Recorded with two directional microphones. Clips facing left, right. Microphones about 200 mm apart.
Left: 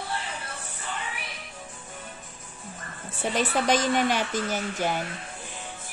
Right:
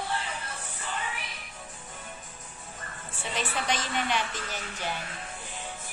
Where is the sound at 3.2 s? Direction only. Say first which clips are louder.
Left 7 dB; 40° left (ahead or behind).